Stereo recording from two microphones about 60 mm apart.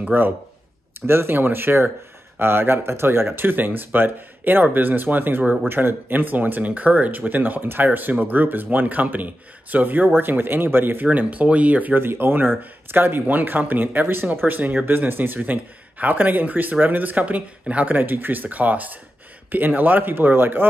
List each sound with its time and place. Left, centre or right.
0.0 s speech: right
11.1 s speech: right
11.9 s speech: right